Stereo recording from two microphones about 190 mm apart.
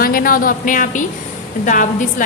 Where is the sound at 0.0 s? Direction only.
50° left (ahead or behind).